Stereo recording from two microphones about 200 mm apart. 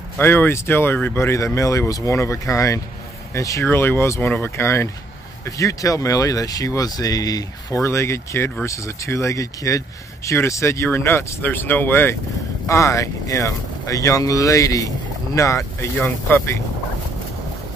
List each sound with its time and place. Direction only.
0.2 s speech: 10° left (ahead or behind)